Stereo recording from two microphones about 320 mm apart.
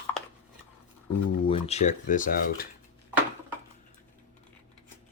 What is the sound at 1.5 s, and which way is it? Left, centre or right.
Speech, centre.